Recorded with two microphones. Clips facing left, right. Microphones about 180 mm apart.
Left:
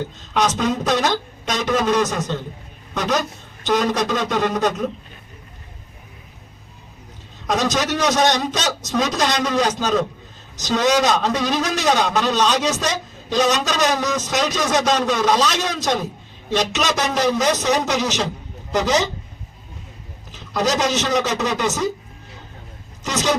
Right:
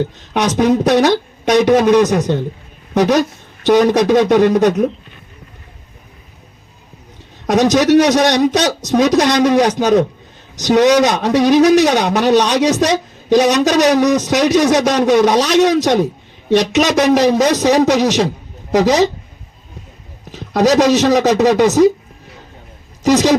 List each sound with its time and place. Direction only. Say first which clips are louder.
0.3 s a man's voice: right 7 dB; 65° right (ahead or behind)
7.4 s a man's voice: right 9 dB; 70° right (ahead or behind)
20.3 s a man's voice: right 9 dB; 65° right (ahead or behind)
23.0 s a man's voice: right 11 dB; 70° right (ahead or behind)